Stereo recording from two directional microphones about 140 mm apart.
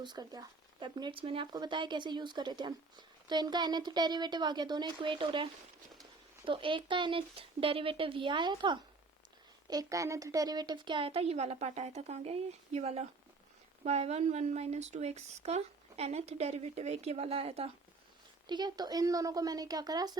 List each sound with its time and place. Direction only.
0.0 s a woman's voice: 30° right (ahead or behind); by 17.7 s 45° right (ahead or behind)
18.4 s a woman's voice: 30° right (ahead or behind)